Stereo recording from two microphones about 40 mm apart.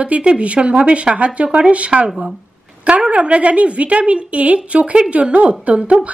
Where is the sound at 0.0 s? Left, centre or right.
Right.